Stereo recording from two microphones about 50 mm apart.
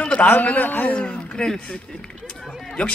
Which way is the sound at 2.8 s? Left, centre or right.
Left.